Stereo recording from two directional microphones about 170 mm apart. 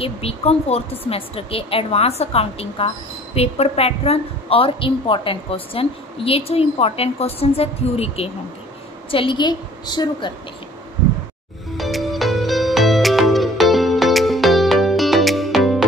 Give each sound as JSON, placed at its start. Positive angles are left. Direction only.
{"t": 0.0, "sound": "a woman's voice", "side_deg": 35}
{"t": 11.7, "sound": "music", "side_deg": 0}